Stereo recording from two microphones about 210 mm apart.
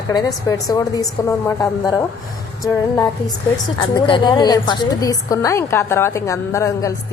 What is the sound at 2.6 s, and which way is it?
A woman's voice, 15° left (ahead or behind).